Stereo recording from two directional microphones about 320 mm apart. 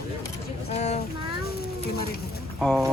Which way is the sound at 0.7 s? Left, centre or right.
Centre.